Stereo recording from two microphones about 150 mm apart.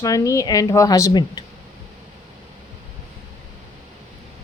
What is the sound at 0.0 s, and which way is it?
A woman's voice, 20° left (ahead or behind).